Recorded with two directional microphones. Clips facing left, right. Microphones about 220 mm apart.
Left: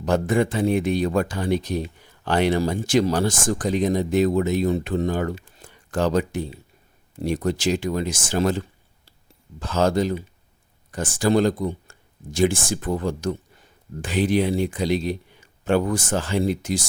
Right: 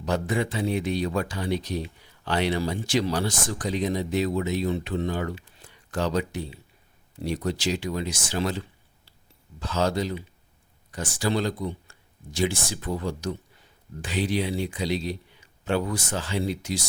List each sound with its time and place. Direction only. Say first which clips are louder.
0.0 s speech: left 6 dB; 50° left (ahead or behind)